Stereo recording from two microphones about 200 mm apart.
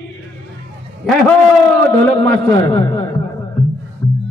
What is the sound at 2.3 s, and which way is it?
Speech, 15° left (ahead or behind).